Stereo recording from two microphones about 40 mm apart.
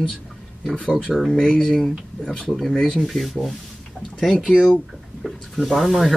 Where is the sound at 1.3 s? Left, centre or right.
Centre.